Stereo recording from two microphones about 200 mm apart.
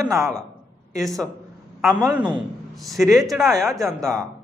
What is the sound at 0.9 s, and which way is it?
A man's voice, centre (ahead or behind).